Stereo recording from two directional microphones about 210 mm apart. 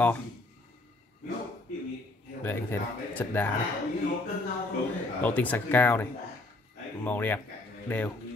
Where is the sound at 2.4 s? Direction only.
10° left (ahead or behind).